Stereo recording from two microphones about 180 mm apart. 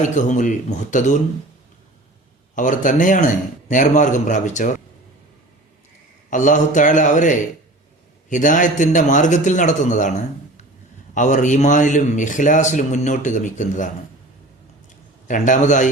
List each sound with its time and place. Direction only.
0.2 s a man's voice: 45° left (ahead or behind)
2.6 s a man's voice: 45° left (ahead or behind)
6.3 s a man's voice: 45° left (ahead or behind)
15.3 s a man's voice: 45° left (ahead or behind)